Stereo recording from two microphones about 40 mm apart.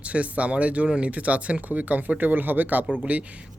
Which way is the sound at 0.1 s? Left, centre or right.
Right.